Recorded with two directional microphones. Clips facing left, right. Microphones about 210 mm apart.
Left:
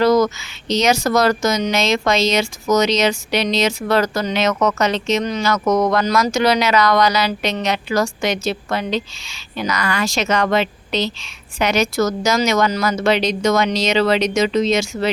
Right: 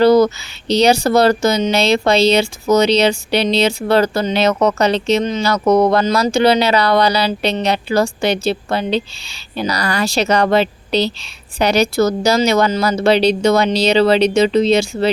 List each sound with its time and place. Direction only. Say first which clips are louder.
0.0 s speech: right 4 dB; 30° right (ahead or behind)